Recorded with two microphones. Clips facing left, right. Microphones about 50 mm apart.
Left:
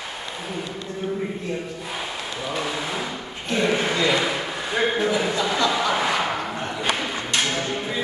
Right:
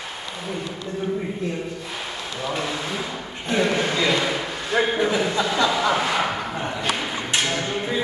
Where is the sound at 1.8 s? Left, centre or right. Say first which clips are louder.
Left 1 dB; centre.